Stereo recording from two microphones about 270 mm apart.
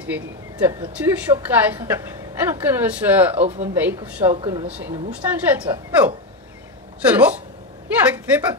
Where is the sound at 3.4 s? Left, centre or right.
Right.